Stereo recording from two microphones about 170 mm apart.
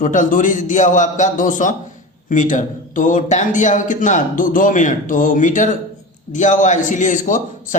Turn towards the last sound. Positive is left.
turn(degrees=50)  # may be behind; listen again after turning